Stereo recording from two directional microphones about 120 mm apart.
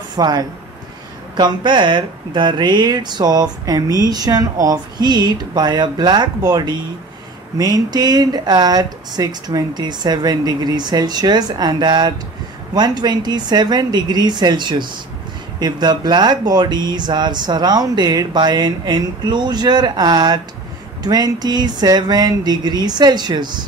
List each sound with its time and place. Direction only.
0.1 s speech: 35° right (ahead or behind)